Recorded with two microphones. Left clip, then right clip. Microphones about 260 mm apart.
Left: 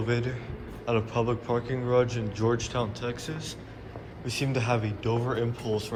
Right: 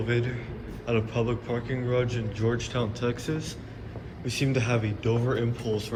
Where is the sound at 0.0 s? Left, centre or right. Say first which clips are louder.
Right 1 dB; centre.